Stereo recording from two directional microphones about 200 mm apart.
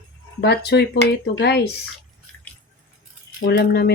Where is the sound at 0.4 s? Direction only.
55° left (ahead or behind).